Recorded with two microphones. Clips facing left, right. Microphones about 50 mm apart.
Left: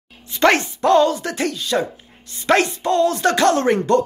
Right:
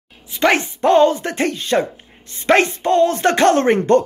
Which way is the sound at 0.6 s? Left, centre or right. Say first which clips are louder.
Right 2 dB; right.